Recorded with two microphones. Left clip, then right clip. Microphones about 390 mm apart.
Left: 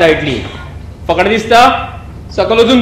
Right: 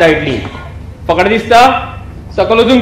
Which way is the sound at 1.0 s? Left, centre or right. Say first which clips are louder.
Right 1 dB; right.